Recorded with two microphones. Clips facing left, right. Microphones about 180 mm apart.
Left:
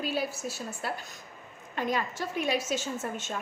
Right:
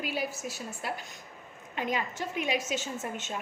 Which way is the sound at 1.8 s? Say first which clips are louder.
Left 2 dB; 15° right (ahead or behind).